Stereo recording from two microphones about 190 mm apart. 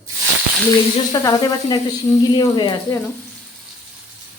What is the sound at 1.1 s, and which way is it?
Speech, 20° left (ahead or behind).